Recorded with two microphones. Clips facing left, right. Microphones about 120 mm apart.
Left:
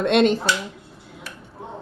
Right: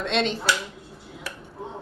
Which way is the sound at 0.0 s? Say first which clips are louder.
Left 8 dB; 50° left (ahead or behind).